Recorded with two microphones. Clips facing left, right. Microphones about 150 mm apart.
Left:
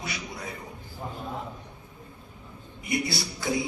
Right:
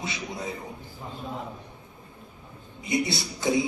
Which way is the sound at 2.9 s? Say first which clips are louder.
Right 2 dB; 20° right (ahead or behind).